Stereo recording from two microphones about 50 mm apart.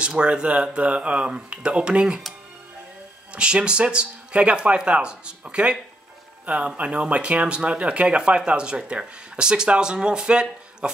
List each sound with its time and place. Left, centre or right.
0.2 s speech: right
3.3 s speech: right